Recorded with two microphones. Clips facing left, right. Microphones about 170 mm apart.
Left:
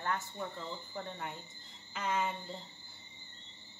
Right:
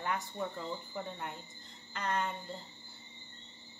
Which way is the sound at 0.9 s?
Centre (ahead or behind).